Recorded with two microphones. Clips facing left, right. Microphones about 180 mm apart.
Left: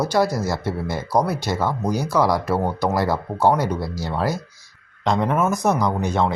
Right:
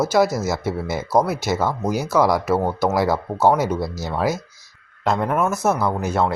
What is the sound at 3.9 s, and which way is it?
Speech, 10° left (ahead or behind).